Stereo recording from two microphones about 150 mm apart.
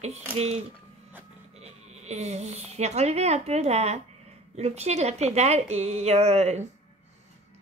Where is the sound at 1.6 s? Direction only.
45° right (ahead or behind).